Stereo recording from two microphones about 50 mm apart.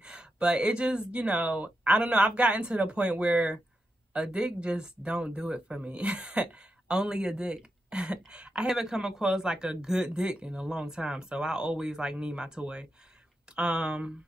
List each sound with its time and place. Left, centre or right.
0.0 s speech: centre